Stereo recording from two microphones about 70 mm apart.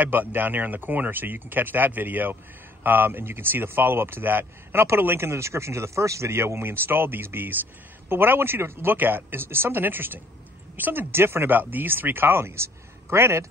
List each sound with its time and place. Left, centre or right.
0.0 s speech: right